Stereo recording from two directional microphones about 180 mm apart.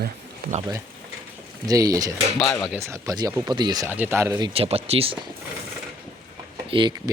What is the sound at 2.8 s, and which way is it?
Speech, 15° right (ahead or behind).